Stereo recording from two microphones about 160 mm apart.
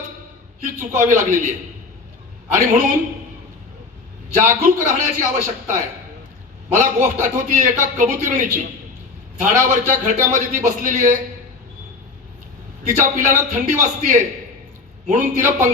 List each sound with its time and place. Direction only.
0.9 s a man's voice: 55° right (ahead or behind)
2.6 s a man's voice: 55° right (ahead or behind)
4.4 s a man's voice: 55° right (ahead or behind)
12.9 s a man's voice: 55° right (ahead or behind)